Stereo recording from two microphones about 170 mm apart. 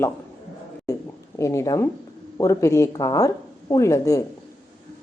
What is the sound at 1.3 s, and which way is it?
A woman's voice, 20° left (ahead or behind).